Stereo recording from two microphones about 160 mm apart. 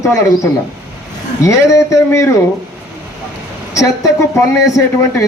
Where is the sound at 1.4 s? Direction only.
20° left (ahead or behind).